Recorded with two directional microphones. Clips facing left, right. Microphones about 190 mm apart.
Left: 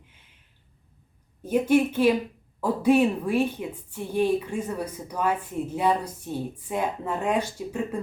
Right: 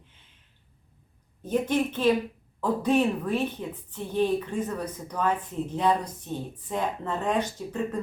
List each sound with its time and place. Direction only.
1.4 s a woman's voice: 10° left (ahead or behind)